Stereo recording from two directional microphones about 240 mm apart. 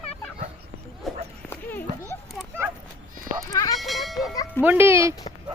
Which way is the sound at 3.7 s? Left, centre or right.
Centre.